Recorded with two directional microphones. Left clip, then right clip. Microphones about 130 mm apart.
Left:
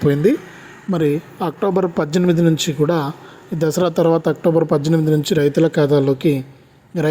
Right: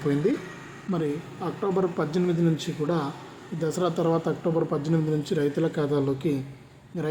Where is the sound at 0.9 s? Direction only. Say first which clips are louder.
Left 11 dB; 70° left (ahead or behind).